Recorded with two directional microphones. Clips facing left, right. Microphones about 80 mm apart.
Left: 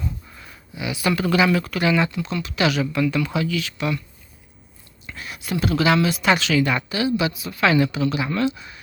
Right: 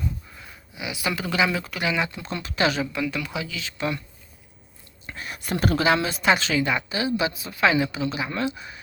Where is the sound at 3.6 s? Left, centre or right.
Right.